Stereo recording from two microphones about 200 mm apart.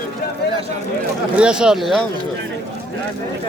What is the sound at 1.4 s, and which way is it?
Speech, 5° right (ahead or behind).